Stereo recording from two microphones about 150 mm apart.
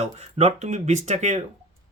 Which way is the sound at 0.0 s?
45° right (ahead or behind).